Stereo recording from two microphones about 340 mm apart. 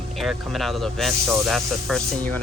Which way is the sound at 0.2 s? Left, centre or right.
Centre.